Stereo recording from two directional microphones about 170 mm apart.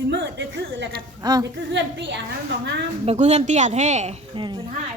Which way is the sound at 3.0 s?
40° right (ahead or behind).